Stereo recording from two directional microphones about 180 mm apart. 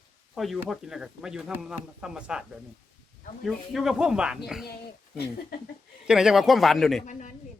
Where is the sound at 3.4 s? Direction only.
Centre (ahead or behind).